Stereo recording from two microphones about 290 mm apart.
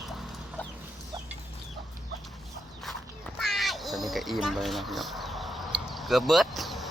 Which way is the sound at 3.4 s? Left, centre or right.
Centre.